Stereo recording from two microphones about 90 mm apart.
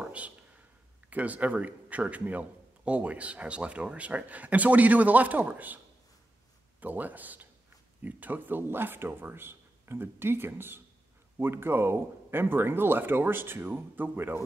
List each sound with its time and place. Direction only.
1.1 s a man's voice: 15° right (ahead or behind)
6.8 s speech: 20° right (ahead or behind)